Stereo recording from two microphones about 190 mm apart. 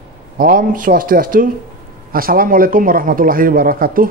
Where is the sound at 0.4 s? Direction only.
45° right (ahead or behind).